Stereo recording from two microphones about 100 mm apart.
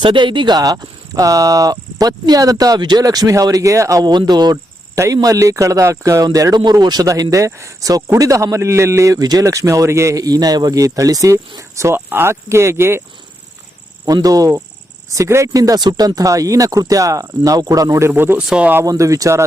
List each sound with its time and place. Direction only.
0.0 s speech: 55° right (ahead or behind)
4.9 s speech: 35° right (ahead or behind)
14.1 s speech: 35° right (ahead or behind)
18.1 s speech: 20° right (ahead or behind)
18.8 s speech: 30° right (ahead or behind)